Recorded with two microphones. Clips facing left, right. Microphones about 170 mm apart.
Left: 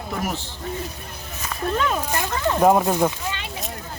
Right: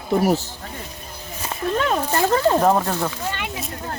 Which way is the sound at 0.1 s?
35° right (ahead or behind).